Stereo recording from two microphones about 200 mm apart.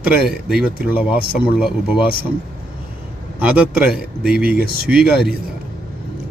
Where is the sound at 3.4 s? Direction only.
5° right (ahead or behind).